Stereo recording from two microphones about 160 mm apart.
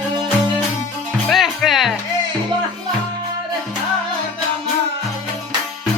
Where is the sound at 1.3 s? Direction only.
Centre (ahead or behind).